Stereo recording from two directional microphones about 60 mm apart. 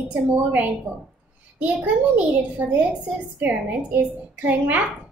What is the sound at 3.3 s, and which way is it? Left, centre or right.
A woman's voice, right.